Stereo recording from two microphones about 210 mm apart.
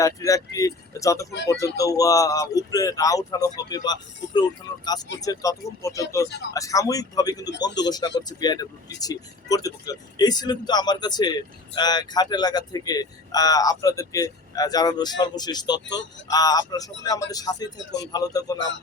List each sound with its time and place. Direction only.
0.0 s speech: 15° left (ahead or behind)
5.2 s speech: 15° left (ahead or behind)